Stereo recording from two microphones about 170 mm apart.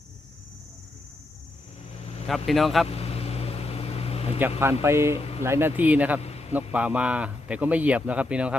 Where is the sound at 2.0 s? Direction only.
40° left (ahead or behind).